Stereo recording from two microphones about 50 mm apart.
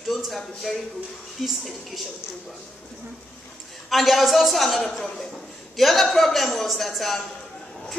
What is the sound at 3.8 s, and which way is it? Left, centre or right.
A man's voice, centre.